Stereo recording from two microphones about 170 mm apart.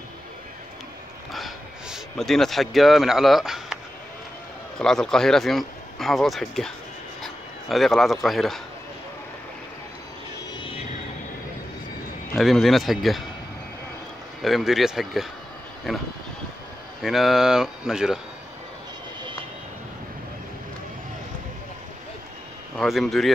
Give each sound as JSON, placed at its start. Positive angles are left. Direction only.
{"t": 1.3, "sound": "a sound", "side_deg": 0}
{"t": 4.7, "sound": "speech", "side_deg": 5}
{"t": 10.6, "sound": "music", "side_deg": 35}
{"t": 12.4, "sound": "speech", "side_deg": 0}
{"t": 14.4, "sound": "speech", "side_deg": 0}
{"t": 22.8, "sound": "speech", "side_deg": 0}